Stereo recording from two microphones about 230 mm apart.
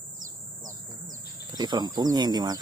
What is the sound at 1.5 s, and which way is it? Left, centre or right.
Speech, centre.